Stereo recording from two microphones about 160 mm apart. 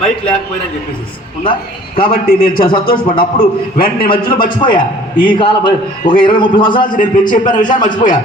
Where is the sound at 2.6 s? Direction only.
30° left (ahead or behind).